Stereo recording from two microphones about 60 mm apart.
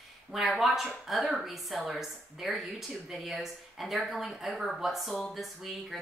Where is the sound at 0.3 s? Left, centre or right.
Centre.